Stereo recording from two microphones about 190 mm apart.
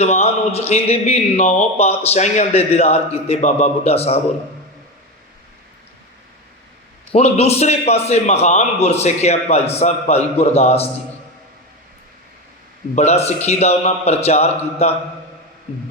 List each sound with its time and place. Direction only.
0.0 s a man's voice: 35° left (ahead or behind)
7.1 s a man's voice: 35° left (ahead or behind)
13.0 s a man's voice: 35° left (ahead or behind)